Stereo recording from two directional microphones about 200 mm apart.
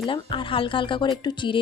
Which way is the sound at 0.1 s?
25° left (ahead or behind).